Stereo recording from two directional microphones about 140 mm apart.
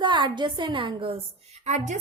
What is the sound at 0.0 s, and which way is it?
A woman's voice, 35° right (ahead or behind).